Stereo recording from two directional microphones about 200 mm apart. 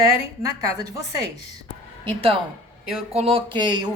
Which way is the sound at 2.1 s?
25° right (ahead or behind).